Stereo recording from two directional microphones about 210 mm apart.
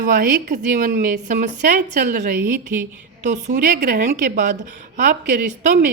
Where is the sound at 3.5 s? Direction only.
50° right (ahead or behind).